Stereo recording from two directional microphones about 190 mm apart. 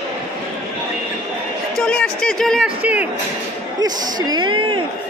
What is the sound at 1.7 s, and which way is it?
Speech, 5° left (ahead or behind).